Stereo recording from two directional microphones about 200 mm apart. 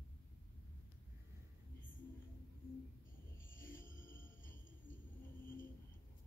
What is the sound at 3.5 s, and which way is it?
Music, 45° left (ahead or behind).